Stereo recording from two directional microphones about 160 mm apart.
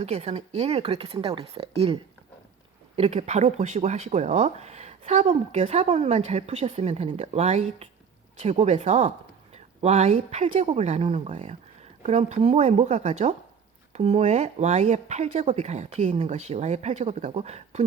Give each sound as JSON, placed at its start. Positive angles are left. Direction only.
{"t": 0.0, "sound": "speech", "side_deg": -40}